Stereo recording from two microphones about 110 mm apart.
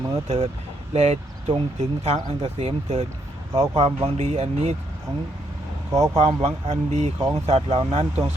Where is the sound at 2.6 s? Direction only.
75° right (ahead or behind).